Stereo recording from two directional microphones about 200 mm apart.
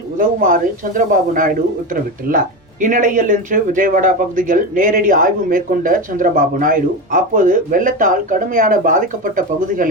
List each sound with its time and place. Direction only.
0.2 s speech: 45° right (ahead or behind)